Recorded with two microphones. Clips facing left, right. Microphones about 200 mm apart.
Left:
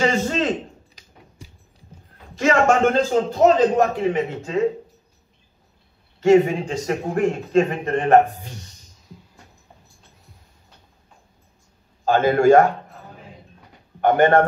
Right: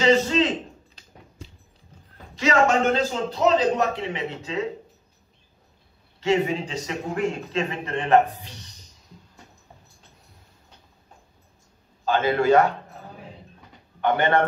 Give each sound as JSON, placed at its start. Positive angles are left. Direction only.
{"t": 0.0, "sound": "a sound", "side_deg": 50}
{"t": 2.3, "sound": "a man's voice", "side_deg": 50}
{"t": 6.2, "sound": "a man's voice", "side_deg": 50}
{"t": 12.0, "sound": "a man's voice", "side_deg": 45}
{"t": 14.0, "sound": "a man's voice", "side_deg": 50}